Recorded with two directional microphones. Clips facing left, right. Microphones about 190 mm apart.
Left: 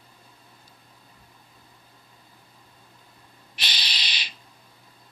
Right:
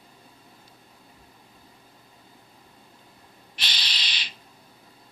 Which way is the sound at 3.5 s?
15° left (ahead or behind).